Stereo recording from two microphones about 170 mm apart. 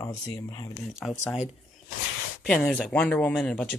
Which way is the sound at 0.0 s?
20° left (ahead or behind).